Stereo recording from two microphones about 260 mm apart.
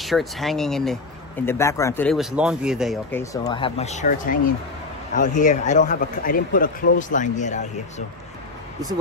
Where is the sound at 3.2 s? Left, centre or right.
Centre.